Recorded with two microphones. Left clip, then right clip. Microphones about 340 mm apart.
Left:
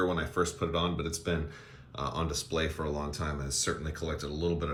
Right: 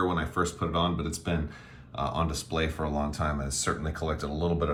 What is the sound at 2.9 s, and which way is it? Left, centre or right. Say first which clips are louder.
Speech: right 4 dB; centre.